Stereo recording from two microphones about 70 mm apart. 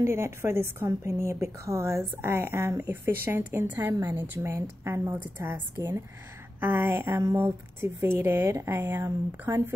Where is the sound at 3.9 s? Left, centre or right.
Right.